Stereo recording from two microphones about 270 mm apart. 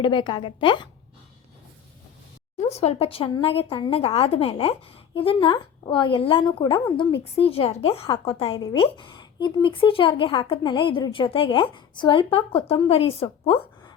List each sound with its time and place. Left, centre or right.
0.0 s a woman's voice: centre
2.6 s speech: left